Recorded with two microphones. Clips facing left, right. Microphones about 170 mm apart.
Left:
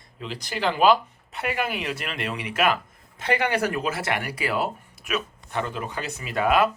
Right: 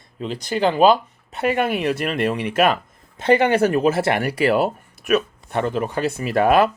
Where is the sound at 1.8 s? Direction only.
45° right (ahead or behind).